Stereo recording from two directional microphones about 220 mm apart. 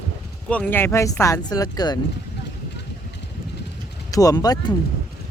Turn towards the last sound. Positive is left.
turn(degrees=15)  # may be behind; listen again after turning